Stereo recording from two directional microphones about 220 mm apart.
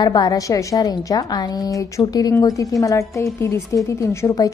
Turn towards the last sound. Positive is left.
turn(degrees=15)  # may be behind; listen again after turning